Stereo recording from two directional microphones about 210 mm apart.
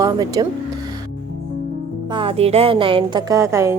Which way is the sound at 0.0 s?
15° right (ahead or behind).